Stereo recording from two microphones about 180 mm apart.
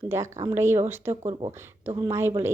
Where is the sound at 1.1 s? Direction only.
35° right (ahead or behind).